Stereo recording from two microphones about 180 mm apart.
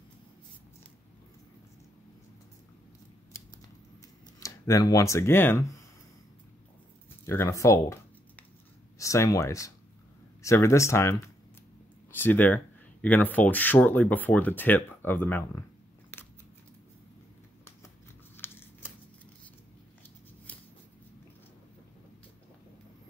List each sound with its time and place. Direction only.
4.4 s speech: 15° left (ahead or behind)
7.2 s a sound: 15° left (ahead or behind)
8.9 s speech: 15° left (ahead or behind)
12.2 s speech: 10° left (ahead or behind)
18.3 s scissors: 10° left (ahead or behind)